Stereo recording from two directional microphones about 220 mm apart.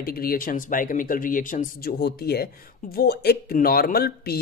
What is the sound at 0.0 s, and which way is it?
Speech, 45° left (ahead or behind).